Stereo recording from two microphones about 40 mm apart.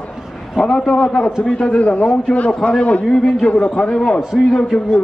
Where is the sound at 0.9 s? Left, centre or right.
Left.